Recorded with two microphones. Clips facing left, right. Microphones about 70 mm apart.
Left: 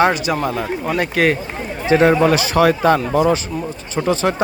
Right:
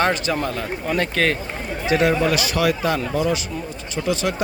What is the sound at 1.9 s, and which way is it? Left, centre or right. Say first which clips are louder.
Speech: left 6 dB; left.